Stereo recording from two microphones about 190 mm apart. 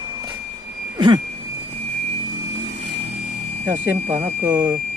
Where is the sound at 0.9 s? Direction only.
25° right (ahead or behind).